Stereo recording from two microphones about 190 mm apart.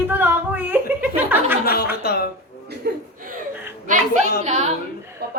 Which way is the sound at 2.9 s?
55° right (ahead or behind).